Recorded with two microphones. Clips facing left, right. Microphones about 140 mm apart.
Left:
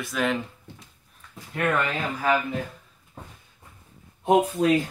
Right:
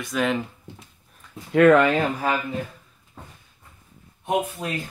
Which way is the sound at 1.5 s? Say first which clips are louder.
Right 10 dB; 90° right.